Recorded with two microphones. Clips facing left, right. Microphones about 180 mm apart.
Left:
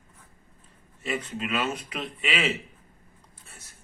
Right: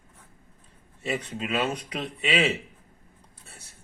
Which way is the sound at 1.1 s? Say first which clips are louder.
Right 1 dB; 35° right (ahead or behind).